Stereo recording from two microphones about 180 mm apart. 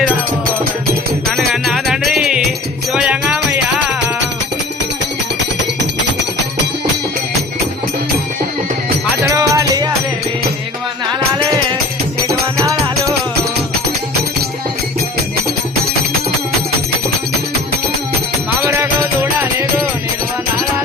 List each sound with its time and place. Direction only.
1.4 s music: centre (ahead or behind)
9.3 s music: 20° right (ahead or behind)
18.6 s music: 15° right (ahead or behind)